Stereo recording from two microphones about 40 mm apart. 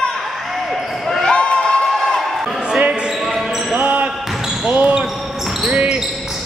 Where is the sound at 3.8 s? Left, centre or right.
Right.